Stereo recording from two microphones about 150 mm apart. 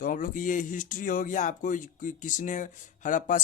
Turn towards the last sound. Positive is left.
turn(degrees=60)  # may be behind; listen again after turning